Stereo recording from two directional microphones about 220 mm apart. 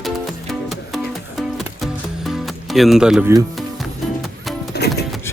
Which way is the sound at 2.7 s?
Centre (ahead or behind).